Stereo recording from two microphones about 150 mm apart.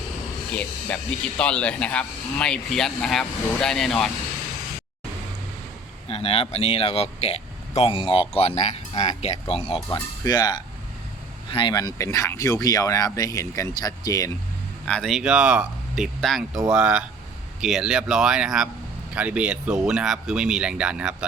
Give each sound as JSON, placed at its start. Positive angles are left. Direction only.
{"t": 0.5, "sound": "speech", "side_deg": 10}
{"t": 6.1, "sound": "speech", "side_deg": 40}
{"t": 10.2, "sound": "speech", "side_deg": 25}
{"t": 14.8, "sound": "speech", "side_deg": 5}